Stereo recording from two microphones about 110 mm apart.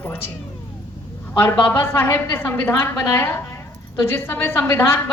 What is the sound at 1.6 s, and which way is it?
A woman's voice, 20° left (ahead or behind).